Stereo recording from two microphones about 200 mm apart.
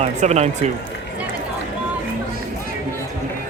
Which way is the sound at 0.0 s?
35° right (ahead or behind).